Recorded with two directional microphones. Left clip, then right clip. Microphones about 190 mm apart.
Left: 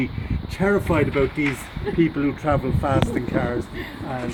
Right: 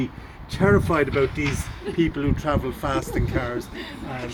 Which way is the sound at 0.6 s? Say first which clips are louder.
Right 1 dB; 45° left (ahead or behind).